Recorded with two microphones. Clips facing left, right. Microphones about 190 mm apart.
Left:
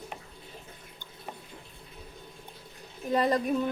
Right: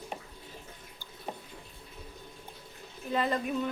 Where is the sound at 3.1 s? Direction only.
40° left (ahead or behind).